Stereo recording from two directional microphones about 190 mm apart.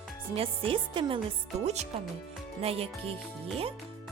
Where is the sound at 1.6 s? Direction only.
35° right (ahead or behind).